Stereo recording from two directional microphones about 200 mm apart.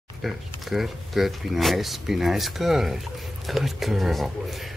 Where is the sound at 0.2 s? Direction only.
Centre (ahead or behind).